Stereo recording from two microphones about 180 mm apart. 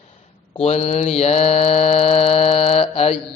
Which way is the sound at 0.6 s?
35° left (ahead or behind).